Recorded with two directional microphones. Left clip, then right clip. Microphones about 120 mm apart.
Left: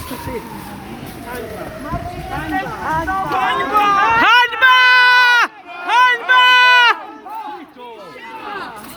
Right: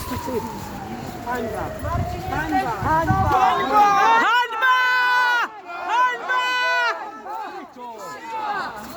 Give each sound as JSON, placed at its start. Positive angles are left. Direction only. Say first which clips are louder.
{"t": 2.6, "sound": "speech", "louder": "even", "side_deg": -20}
{"t": 3.1, "sound": "speech", "louder": "left 1 dB", "side_deg": 0}
{"t": 4.2, "sound": "a sound", "louder": "left 7 dB", "side_deg": 35}
{"t": 5.9, "sound": "run", "louder": "left 8 dB", "side_deg": 55}